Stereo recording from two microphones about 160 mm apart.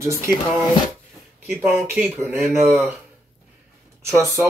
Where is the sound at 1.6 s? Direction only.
10° right (ahead or behind).